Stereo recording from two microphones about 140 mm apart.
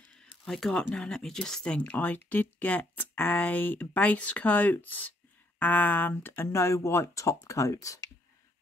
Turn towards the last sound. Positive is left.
turn(degrees=25)  # may be behind; listen again after turning